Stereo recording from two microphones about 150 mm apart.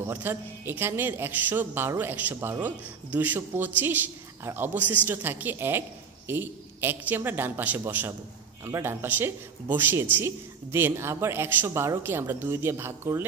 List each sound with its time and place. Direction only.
0.0 s a man's voice: 15° right (ahead or behind)